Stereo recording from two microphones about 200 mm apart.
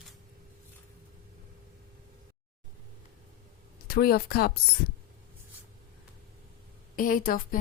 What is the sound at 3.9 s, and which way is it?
Speech, 50° left (ahead or behind).